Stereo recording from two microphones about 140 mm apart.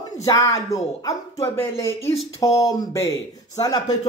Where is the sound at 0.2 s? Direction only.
25° left (ahead or behind).